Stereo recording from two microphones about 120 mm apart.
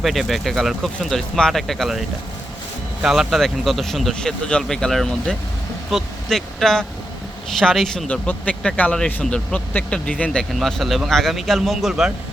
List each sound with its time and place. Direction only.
0.0 s speech: centre (ahead or behind)
3.0 s speech: centre (ahead or behind)